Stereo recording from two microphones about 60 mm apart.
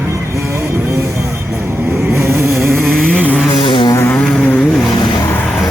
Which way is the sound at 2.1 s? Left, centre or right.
Right.